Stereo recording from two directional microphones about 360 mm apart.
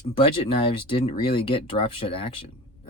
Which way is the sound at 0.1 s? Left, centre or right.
Centre.